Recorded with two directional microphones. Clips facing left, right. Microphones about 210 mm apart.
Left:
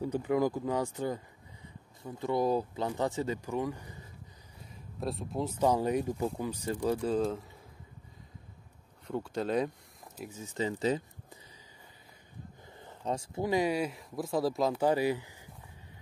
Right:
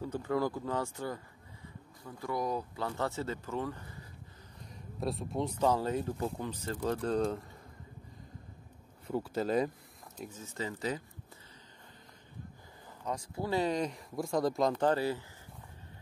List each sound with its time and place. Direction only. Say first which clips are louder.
0.0 s speech: left 4 dB; 15° left (ahead or behind)
5.0 s speech: even; centre (ahead or behind)
9.0 s speech: even; 5° right (ahead or behind)
10.1 s speech: left 4 dB; 10° left (ahead or behind)
13.0 s speech: left 4 dB; 25° left (ahead or behind)